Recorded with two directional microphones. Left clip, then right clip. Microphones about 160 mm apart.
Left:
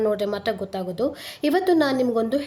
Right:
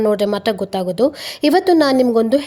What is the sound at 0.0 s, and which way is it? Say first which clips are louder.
A woman's voice: right 7 dB; 45° right (ahead or behind).